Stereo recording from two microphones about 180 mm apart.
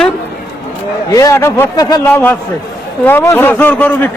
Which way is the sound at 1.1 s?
15° left (ahead or behind).